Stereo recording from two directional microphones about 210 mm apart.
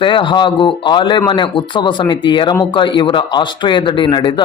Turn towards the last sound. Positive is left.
turn(degrees=20)  # may be behind; listen again after turning